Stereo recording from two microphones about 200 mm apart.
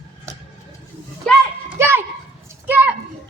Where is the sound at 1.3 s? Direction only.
5° left (ahead or behind).